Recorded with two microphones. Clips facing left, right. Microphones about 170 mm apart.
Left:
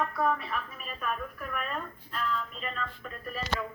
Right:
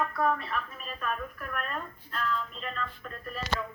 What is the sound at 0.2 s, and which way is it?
Speech, 5° left (ahead or behind).